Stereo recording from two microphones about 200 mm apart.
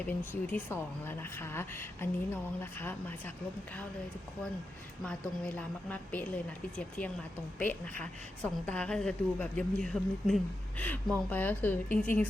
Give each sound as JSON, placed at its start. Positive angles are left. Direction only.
{"t": 0.0, "sound": "speech", "side_deg": 10}
{"t": 5.0, "sound": "a woman's voice", "side_deg": 5}